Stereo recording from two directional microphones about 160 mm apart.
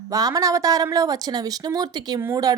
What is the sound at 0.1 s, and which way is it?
A woman's voice, 20° right (ahead or behind).